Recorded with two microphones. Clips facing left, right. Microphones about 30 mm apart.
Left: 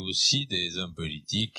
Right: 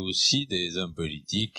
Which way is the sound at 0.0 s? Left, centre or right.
Centre.